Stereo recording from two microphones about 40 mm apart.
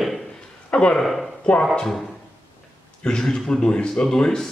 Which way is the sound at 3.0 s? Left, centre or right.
Centre.